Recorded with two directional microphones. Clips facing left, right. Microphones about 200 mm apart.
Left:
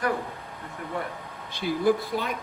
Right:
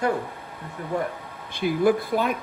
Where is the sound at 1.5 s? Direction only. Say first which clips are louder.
Right 3 dB; 55° right (ahead or behind).